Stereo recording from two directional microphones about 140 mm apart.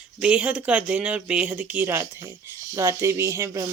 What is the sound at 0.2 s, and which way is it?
Speech, 10° right (ahead or behind).